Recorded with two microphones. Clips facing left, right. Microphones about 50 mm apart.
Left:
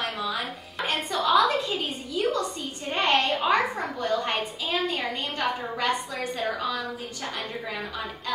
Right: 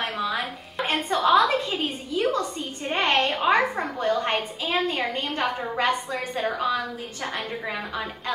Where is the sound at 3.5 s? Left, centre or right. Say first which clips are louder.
Right 2 dB; right.